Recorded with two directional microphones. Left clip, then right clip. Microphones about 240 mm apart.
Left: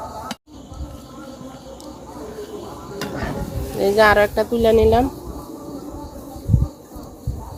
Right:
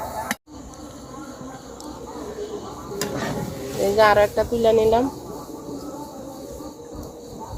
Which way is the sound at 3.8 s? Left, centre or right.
Left.